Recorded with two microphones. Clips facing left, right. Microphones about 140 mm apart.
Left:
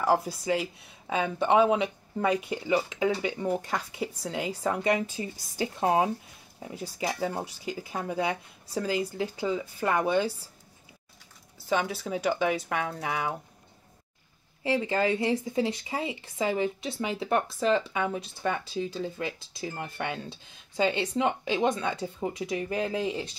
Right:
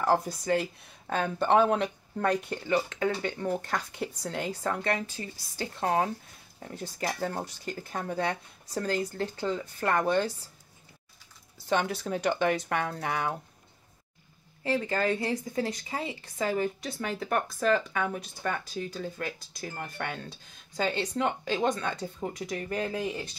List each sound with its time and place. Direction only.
0.0 s speech: 5° left (ahead or behind)
11.5 s speech: 5° left (ahead or behind)
14.8 s speech: 15° left (ahead or behind)
18.6 s speech: 25° left (ahead or behind)
19.0 s speech: 5° left (ahead or behind); by 23.3 s 20° left (ahead or behind)